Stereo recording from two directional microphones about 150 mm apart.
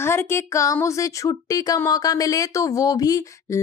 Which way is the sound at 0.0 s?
15° left (ahead or behind).